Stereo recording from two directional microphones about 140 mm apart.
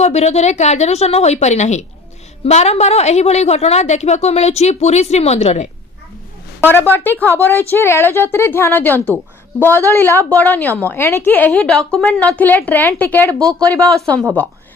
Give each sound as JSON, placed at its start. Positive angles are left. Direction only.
{"t": 0.0, "sound": "a woman's voice", "side_deg": 50}
{"t": 6.6, "sound": "a woman's voice", "side_deg": 15}